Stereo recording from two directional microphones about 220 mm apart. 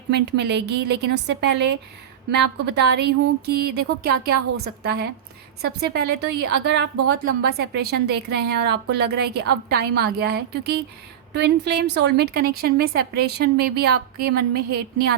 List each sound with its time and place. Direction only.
0.1 s a woman's voice: 50° right (ahead or behind)